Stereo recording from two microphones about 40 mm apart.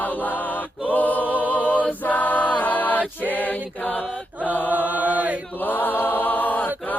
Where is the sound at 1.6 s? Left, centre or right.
Left.